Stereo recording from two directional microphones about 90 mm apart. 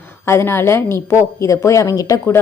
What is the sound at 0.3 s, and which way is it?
A woman's voice, 30° left (ahead or behind).